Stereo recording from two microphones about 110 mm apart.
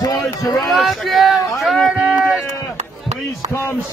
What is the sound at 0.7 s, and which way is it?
Speech, centre (ahead or behind).